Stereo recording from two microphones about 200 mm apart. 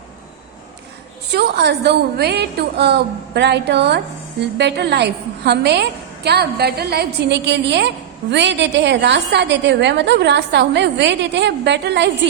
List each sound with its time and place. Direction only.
1.3 s a woman's voice: 55° right (ahead or behind)